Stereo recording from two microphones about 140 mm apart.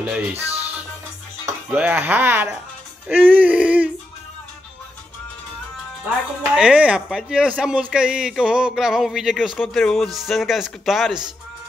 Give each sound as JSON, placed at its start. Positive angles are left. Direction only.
{"t": 0.3, "sound": "speech", "side_deg": -45}
{"t": 1.7, "sound": "speech", "side_deg": -10}
{"t": 6.0, "sound": "speech", "side_deg": -5}